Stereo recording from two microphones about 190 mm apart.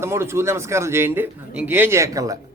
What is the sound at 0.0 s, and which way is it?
A man's voice, 15° right (ahead or behind).